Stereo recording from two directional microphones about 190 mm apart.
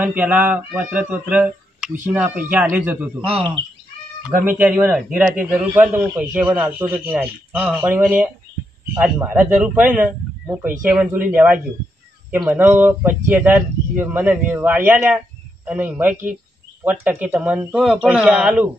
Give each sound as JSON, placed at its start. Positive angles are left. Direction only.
{"t": 0.0, "sound": "a man's voice", "side_deg": -10}
{"t": 3.3, "sound": "speech", "side_deg": -30}
{"t": 4.2, "sound": "a man's voice", "side_deg": -10}